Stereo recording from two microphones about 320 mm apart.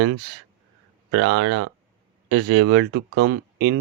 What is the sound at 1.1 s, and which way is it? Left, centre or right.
Speech, right.